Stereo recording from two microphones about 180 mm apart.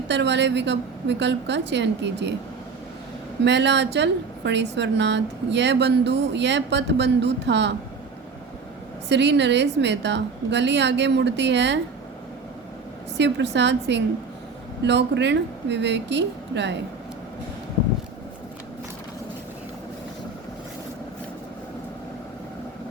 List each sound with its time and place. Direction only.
0.1 s a woman's voice: 75° right (ahead or behind)
3.4 s a woman's voice: 75° right (ahead or behind)
9.0 s a woman's voice: 75° right (ahead or behind)
13.1 s a woman's voice: 75° right (ahead or behind)